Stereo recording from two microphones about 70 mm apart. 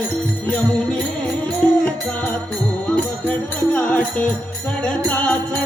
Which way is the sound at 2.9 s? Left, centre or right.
Centre.